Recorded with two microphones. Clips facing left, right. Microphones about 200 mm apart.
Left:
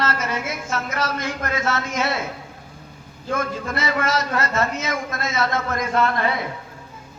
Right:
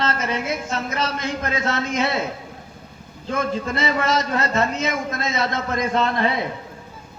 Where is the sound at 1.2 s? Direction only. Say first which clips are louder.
Right 1 dB; 20° right (ahead or behind).